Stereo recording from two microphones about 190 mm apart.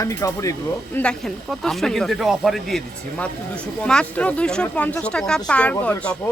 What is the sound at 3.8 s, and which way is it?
Speech, 5° left (ahead or behind).